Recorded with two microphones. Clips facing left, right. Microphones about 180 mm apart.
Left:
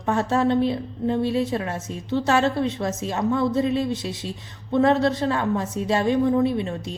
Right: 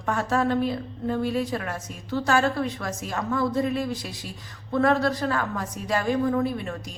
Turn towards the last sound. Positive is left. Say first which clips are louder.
# left 5 dB
turn(degrees=25)  # may be behind; listen again after turning